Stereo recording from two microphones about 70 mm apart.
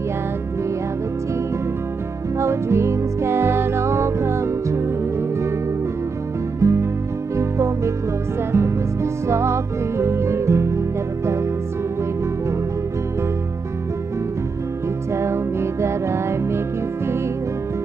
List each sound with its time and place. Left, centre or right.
2.3 s music: right
6.6 s music: right
15.1 s music: right